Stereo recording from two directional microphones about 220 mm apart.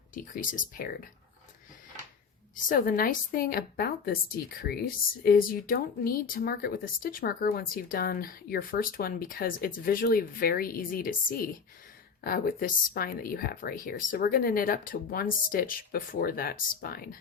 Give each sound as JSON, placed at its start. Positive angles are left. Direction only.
{"t": 0.1, "sound": "a woman's voice", "side_deg": 40}
{"t": 2.6, "sound": "a woman's voice", "side_deg": 40}